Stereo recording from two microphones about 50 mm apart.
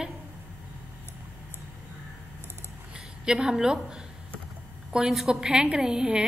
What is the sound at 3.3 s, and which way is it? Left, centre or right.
Speech, centre.